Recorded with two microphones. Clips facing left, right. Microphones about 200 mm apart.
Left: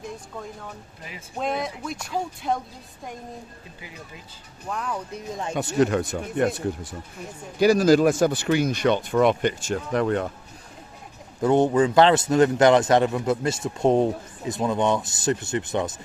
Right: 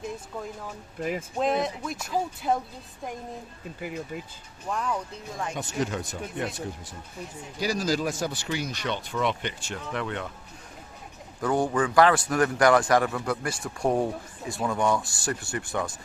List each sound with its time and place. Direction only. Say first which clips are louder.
1.4 s speech: even; centre (ahead or behind)
4.7 s speech: right 1 dB; centre (ahead or behind)
5.1 s a man's voice: left 3 dB; 25° left (ahead or behind)
5.5 s speech: left 10 dB; 60° left (ahead or behind)
7.6 s speech: left 10 dB; 60° left (ahead or behind); by 10.3 s 40° left (ahead or behind)
11.3 s a man's voice: left 6 dB; 25° left (ahead or behind)